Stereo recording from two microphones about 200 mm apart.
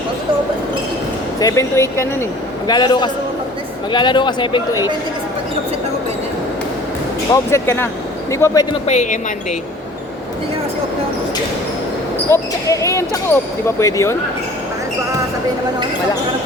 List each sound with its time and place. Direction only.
1.4 s speech: 15° left (ahead or behind)
7.5 s speech: 15° left (ahead or behind)
8.9 s speech: 35° left (ahead or behind)
12.3 s speech: 15° left (ahead or behind)